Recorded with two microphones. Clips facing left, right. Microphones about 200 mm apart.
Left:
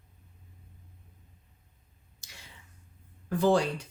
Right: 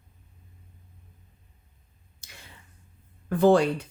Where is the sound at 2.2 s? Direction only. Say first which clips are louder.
Right 3 dB; 55° right (ahead or behind).